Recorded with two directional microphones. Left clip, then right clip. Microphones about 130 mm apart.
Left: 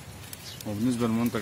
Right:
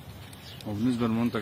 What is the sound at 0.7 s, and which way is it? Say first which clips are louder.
Speech: left 1 dB; 90° left.